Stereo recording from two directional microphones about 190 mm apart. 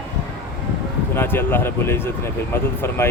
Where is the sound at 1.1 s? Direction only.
10° left (ahead or behind).